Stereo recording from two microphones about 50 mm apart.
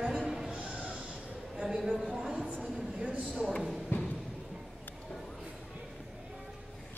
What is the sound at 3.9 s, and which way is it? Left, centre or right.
Music, left.